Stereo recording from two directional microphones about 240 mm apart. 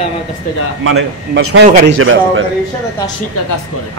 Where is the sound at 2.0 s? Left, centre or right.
Right.